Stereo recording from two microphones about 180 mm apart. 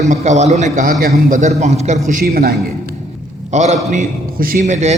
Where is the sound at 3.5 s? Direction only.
40° right (ahead or behind).